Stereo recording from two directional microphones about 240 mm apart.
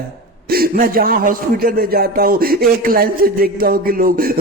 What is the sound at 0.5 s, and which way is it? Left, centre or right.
A man's voice, right.